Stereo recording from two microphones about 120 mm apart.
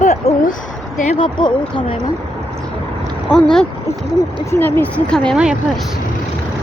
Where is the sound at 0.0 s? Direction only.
75° left (ahead or behind).